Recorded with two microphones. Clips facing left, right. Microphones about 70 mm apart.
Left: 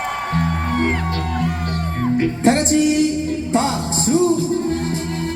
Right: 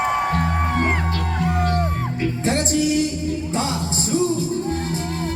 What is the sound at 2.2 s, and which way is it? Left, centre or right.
Music, left.